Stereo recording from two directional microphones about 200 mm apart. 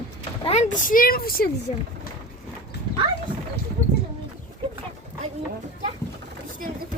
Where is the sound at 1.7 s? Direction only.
35° left (ahead or behind).